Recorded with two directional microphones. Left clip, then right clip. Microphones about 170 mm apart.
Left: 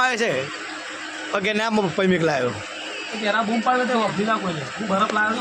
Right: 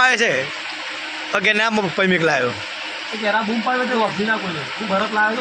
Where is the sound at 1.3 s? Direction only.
10° left (ahead or behind).